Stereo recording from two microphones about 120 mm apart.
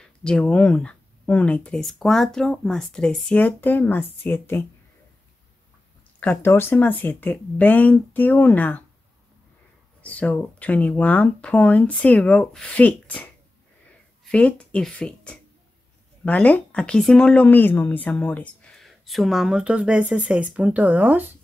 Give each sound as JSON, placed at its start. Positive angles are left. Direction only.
{"t": 0.0, "sound": "speech", "side_deg": 10}
{"t": 6.4, "sound": "speech", "side_deg": 20}
{"t": 10.0, "sound": "speech", "side_deg": 10}
{"t": 14.3, "sound": "speech", "side_deg": 10}